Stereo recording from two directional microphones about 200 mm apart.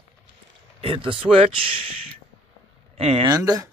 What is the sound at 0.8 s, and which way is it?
Speech, 25° right (ahead or behind).